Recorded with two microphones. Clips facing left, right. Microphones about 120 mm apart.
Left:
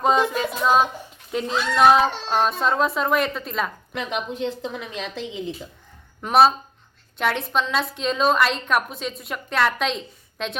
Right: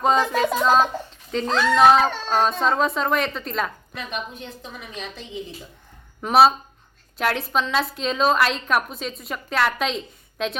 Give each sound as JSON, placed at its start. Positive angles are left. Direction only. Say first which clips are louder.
{"t": 0.0, "sound": "a woman's voice", "louder": "right 1 dB", "side_deg": 0}
{"t": 3.9, "sound": "a woman's voice", "louder": "left 4 dB", "side_deg": 90}
{"t": 6.2, "sound": "a woman's voice", "louder": "right 1 dB", "side_deg": 0}